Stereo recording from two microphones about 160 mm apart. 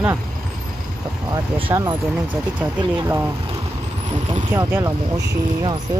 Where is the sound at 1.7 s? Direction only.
20° right (ahead or behind).